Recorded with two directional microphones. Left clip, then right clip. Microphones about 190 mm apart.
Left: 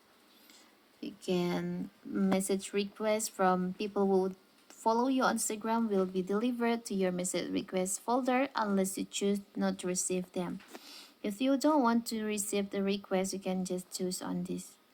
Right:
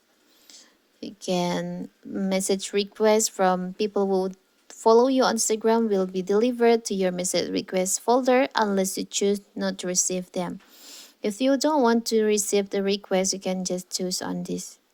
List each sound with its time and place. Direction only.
0.9 s speech: 30° right (ahead or behind)
2.3 s speech: 35° right (ahead or behind)